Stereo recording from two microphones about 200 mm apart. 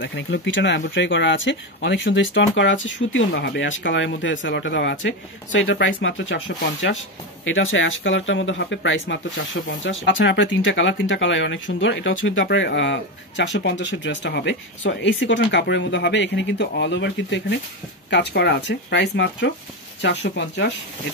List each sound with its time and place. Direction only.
0.0 s speech: 70° left (ahead or behind)
6.8 s speech: 65° left (ahead or behind)